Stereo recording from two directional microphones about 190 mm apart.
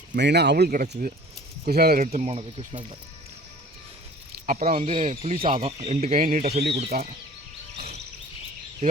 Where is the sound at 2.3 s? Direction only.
30° right (ahead or behind).